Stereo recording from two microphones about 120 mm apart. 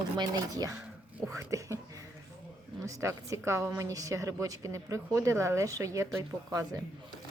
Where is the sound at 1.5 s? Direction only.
25° right (ahead or behind).